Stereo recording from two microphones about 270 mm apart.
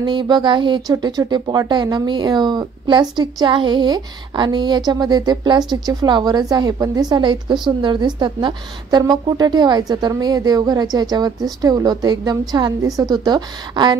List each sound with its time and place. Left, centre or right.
0.0 s speech: centre